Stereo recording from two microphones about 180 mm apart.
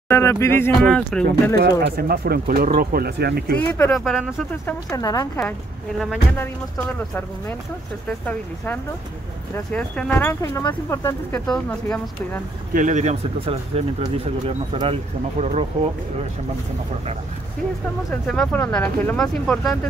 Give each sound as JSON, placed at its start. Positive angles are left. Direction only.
{"t": 0.1, "sound": "speech", "side_deg": 15}
{"t": 1.2, "sound": "speech", "side_deg": -60}
{"t": 3.5, "sound": "speech", "side_deg": 10}
{"t": 4.0, "sound": "speech", "side_deg": -5}
{"t": 4.9, "sound": "speech", "side_deg": 20}
{"t": 8.1, "sound": "speech", "side_deg": 5}
{"t": 11.4, "sound": "speech", "side_deg": 5}
{"t": 12.7, "sound": "speech", "side_deg": -45}
{"t": 18.2, "sound": "speech", "side_deg": 5}